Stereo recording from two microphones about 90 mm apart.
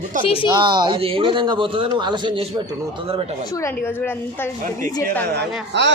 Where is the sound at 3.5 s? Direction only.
30° left (ahead or behind).